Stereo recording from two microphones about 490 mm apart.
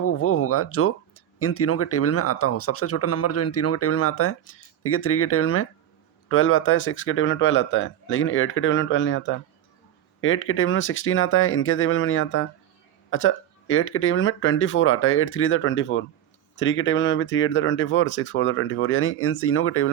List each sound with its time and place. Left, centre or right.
0.0 s speech: left